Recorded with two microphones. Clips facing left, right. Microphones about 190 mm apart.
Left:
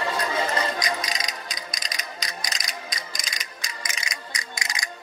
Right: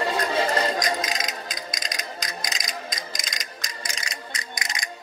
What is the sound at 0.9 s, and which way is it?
Music, 45° right (ahead or behind).